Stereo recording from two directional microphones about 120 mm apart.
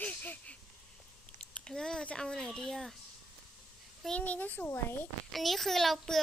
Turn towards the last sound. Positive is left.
turn(degrees=0)  # may be behind; listen again after turning